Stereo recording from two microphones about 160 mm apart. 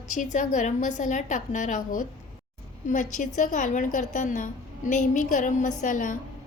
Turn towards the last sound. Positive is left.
turn(degrees=55)  # may be behind; listen again after turning